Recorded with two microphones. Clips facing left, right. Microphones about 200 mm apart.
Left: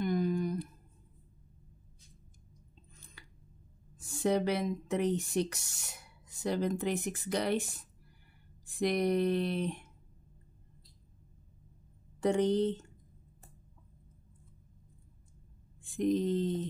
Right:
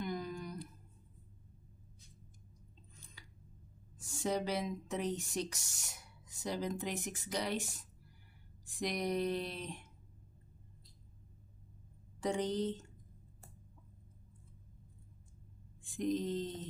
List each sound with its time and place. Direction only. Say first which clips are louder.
0.0 s a sound: left 9 dB; 55° left (ahead or behind)
4.0 s speech: left 6 dB; 60° left (ahead or behind)
12.2 s speech: left 7 dB; 60° left (ahead or behind)
16.0 s speech: left 6 dB; 60° left (ahead or behind)